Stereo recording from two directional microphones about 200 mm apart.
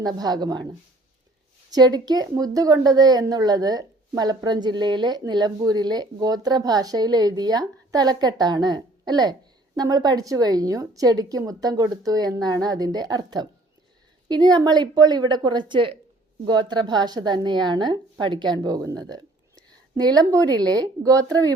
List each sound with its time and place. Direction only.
0.0 s a woman's voice: 20° right (ahead or behind)